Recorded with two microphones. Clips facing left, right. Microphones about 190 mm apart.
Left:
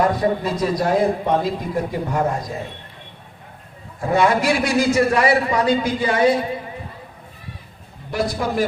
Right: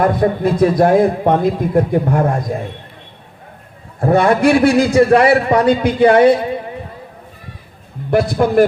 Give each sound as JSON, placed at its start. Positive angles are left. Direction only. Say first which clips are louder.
{"t": 0.0, "sound": "a man's voice", "louder": "right 4 dB", "side_deg": -55}
{"t": 4.0, "sound": "a man's voice", "louder": "right 6 dB", "side_deg": -55}
{"t": 8.1, "sound": "a man's voice", "louder": "right 9 dB", "side_deg": -55}